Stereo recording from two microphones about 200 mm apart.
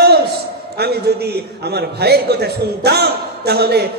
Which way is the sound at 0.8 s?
55° right (ahead or behind).